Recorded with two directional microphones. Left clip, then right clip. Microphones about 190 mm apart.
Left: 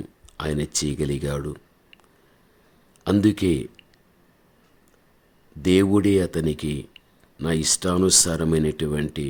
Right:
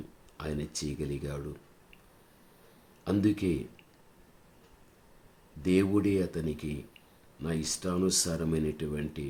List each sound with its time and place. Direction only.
0.3 s speech: 50° left (ahead or behind)
3.0 s speech: 50° left (ahead or behind)
5.6 s speech: 50° left (ahead or behind)